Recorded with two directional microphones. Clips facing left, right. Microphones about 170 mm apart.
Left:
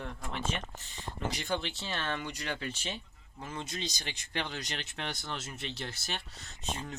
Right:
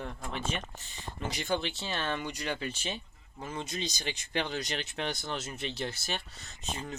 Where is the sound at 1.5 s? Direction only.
10° right (ahead or behind).